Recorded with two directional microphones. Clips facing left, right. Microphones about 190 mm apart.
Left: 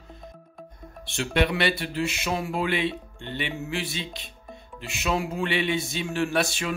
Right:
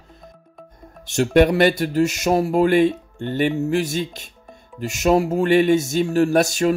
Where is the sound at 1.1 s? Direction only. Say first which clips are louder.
Right 10 dB; 45° right (ahead or behind).